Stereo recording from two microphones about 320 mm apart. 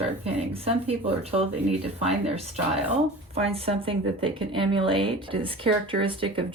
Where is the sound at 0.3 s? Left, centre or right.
Centre.